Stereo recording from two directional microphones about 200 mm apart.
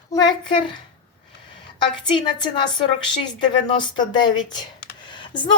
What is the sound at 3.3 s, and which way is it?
A woman's voice, 20° left (ahead or behind).